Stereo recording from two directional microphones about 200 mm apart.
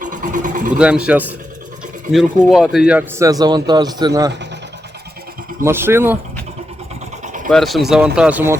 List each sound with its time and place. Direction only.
0.0 s vehicle: 40° right (ahead or behind)
0.8 s a man's voice: 5° right (ahead or behind)
5.6 s a man's voice: 10° right (ahead or behind)
7.5 s speech: centre (ahead or behind)